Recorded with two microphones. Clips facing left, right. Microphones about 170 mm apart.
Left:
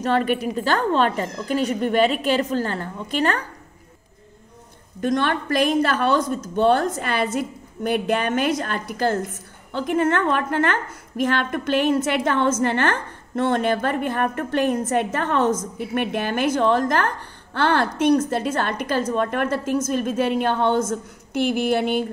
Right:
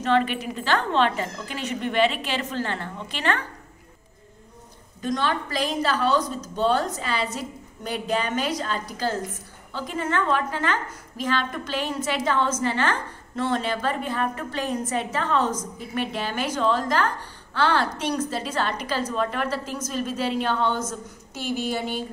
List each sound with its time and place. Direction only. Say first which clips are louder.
0.0 s speech: left 2 dB; 45° left (ahead or behind)
5.0 s a woman's voice: left 4 dB; 55° left (ahead or behind)